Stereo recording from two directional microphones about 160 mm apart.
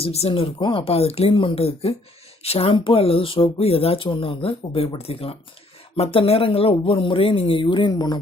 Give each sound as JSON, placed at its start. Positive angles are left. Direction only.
{"t": 0.0, "sound": "speech", "side_deg": 40}